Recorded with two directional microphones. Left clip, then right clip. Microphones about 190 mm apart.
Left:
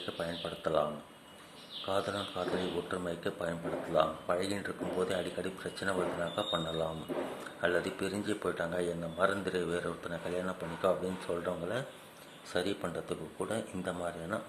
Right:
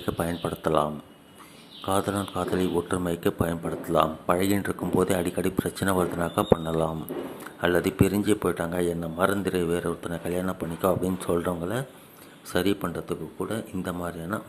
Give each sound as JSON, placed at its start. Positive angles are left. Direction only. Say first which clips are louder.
{"t": 0.0, "sound": "speech", "louder": "right 8 dB", "side_deg": -25}
{"t": 1.9, "sound": "speech", "louder": "right 8 dB", "side_deg": -20}